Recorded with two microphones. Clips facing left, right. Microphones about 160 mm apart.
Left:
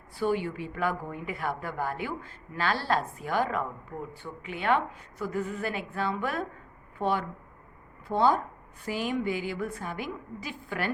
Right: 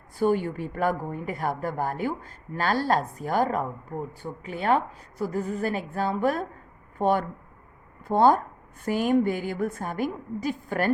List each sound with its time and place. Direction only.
0.2 s a woman's voice: 45° right (ahead or behind)